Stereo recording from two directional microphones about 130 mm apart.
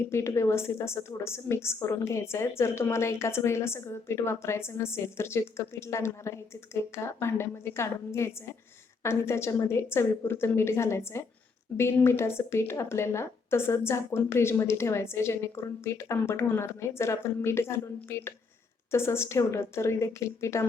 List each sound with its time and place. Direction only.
0.1 s a woman's voice: 20° left (ahead or behind)